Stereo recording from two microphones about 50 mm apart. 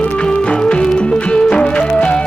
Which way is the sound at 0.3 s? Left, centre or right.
Centre.